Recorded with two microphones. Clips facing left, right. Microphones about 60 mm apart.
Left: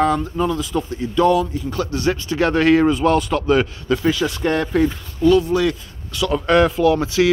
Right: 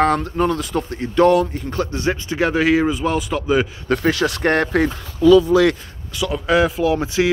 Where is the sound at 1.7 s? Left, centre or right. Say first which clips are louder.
Left 2 dB; right.